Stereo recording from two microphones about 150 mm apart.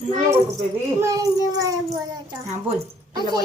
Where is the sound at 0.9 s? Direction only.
20° right (ahead or behind).